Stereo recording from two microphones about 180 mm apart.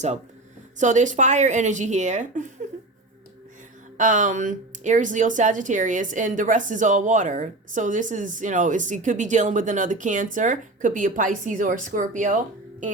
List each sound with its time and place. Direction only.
0.8 s speech: 45° right (ahead or behind)
3.9 s speech: 45° right (ahead or behind)